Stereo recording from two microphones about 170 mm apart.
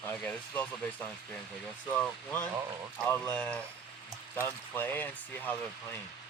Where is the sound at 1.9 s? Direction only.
10° left (ahead or behind).